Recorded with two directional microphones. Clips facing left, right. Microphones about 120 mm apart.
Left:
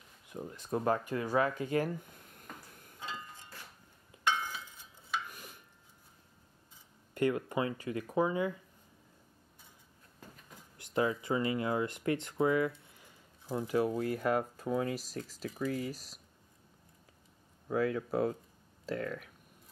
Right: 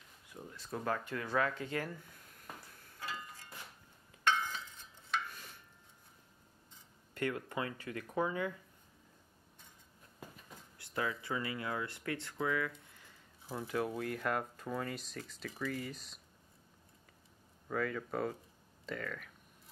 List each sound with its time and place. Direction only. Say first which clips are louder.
0.3 s speech: left 8 dB; 25° left (ahead or behind)
1.0 s speech: left 4 dB; 15° left (ahead or behind)
2.8 s a sound: left 1 dB; 20° left (ahead or behind)
7.2 s speech: left 6 dB; 15° left (ahead or behind)
10.8 s speech: left 7 dB; 20° left (ahead or behind)
13.6 s speech: left 6 dB; 10° left (ahead or behind)
17.6 s speech: left 5 dB; 10° left (ahead or behind)